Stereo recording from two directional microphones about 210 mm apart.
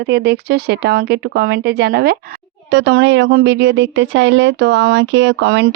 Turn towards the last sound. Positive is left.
turn(degrees=-55)  # may be behind; listen again after turning